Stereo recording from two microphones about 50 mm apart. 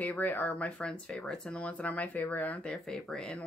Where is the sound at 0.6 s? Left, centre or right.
Left.